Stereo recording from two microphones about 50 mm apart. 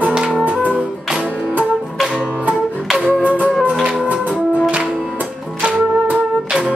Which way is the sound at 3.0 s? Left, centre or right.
Right.